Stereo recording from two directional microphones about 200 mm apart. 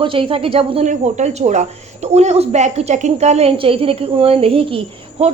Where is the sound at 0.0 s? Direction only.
25° right (ahead or behind).